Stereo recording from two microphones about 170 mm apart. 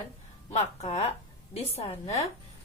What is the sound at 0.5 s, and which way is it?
A woman's voice, 40° left (ahead or behind).